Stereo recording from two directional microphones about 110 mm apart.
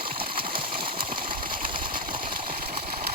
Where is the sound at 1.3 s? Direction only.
50° right (ahead or behind).